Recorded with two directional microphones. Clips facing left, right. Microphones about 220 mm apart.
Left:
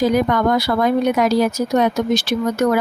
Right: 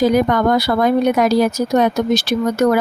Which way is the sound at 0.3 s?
40° right (ahead or behind).